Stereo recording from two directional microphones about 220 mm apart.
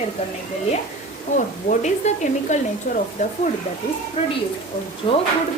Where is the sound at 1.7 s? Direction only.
35° left (ahead or behind).